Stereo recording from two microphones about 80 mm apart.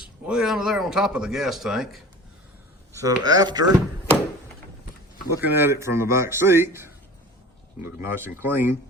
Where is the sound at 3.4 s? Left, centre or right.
Right.